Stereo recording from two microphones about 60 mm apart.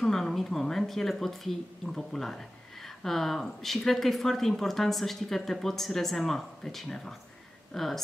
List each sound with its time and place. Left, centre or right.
0.0 s speech: centre